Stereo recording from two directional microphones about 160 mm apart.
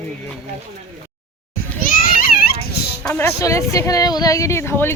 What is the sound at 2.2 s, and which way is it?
Dog, 75° left (ahead or behind).